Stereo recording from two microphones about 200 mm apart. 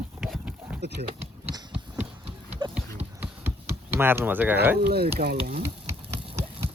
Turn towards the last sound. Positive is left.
turn(degrees=-50)  # may be behind; listen again after turning